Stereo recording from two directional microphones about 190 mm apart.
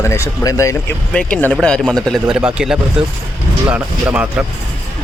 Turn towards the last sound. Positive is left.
turn(degrees=-10)  # may be behind; listen again after turning